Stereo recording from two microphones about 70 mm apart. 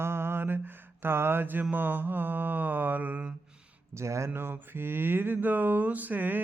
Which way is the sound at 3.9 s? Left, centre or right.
Right.